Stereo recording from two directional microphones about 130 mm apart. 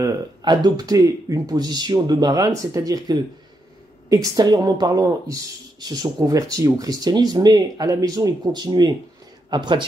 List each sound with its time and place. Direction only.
0.0 s speech: 35° right (ahead or behind)